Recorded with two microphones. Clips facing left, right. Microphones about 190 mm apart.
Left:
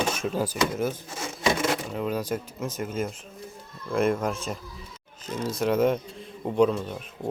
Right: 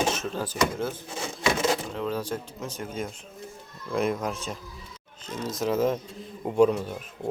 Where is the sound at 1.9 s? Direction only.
10° left (ahead or behind).